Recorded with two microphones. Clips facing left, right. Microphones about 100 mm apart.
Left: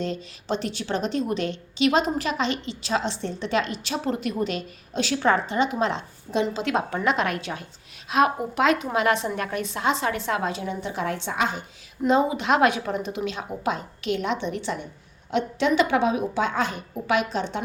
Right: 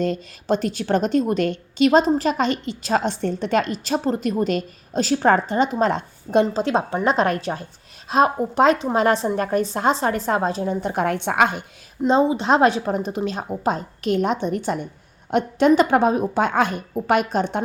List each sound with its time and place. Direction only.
0.0 s a woman's voice: 50° right (ahead or behind)
12.0 s a woman's voice: 30° right (ahead or behind); by 17.6 s 50° right (ahead or behind)